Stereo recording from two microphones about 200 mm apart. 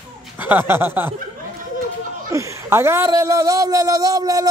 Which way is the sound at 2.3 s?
15° right (ahead or behind).